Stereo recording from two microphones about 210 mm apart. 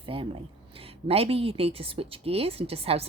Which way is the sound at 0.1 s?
25° right (ahead or behind).